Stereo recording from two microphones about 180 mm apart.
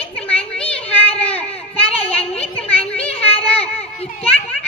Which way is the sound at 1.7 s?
35° left (ahead or behind).